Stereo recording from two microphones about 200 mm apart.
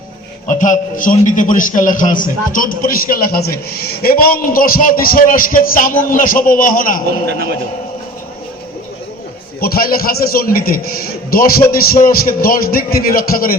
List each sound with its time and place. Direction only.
0.4 s a man's voice: 40° left (ahead or behind)
9.6 s a man's voice: 50° left (ahead or behind)